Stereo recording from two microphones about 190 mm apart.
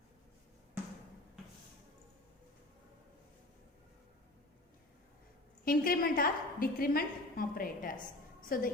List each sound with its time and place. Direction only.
5.6 s a woman's voice: 50° left (ahead or behind)